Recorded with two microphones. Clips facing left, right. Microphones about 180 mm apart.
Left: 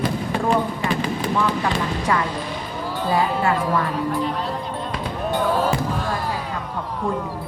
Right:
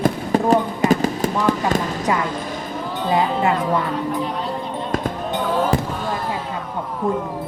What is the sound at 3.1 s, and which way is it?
Speech, 20° right (ahead or behind).